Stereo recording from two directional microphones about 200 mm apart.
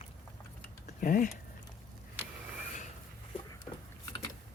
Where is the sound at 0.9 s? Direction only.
40° left (ahead or behind).